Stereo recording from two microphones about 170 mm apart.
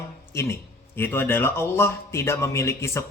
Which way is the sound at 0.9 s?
10° left (ahead or behind).